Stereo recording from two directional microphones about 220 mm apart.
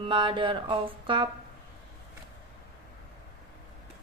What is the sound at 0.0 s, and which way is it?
Speech, 20° right (ahead or behind).